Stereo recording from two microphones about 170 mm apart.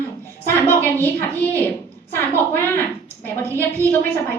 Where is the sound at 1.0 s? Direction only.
10° left (ahead or behind).